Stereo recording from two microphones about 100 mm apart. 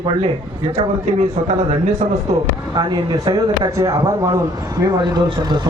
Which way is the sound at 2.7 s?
45° right (ahead or behind).